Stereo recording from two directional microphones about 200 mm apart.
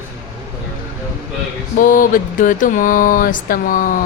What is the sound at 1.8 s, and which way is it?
A woman's voice, 40° left (ahead or behind).